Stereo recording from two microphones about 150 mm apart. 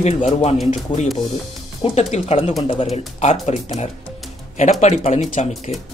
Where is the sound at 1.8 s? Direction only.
45° left (ahead or behind).